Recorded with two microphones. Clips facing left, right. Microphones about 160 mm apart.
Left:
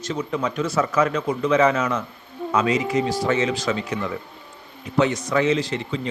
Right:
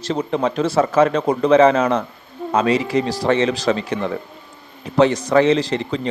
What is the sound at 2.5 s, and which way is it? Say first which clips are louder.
Speech: right 3 dB; 55° right (ahead or behind).